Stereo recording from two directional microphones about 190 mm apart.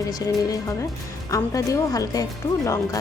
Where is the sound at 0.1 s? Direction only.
20° left (ahead or behind).